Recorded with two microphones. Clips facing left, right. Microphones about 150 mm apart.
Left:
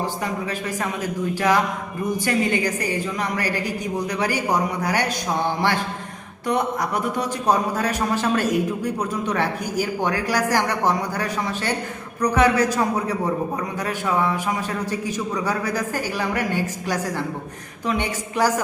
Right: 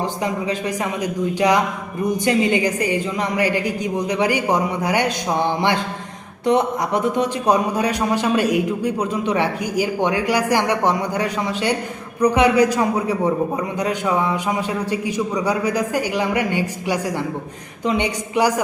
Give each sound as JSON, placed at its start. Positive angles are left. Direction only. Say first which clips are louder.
{"t": 0.0, "sound": "a man's voice", "louder": "right 3 dB", "side_deg": -20}
{"t": 6.4, "sound": "a man's voice", "louder": "right 5 dB", "side_deg": -20}